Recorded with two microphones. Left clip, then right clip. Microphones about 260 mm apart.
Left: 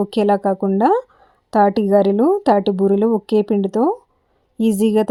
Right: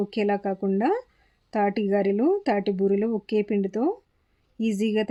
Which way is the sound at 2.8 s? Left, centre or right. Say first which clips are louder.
Left 7 dB; left.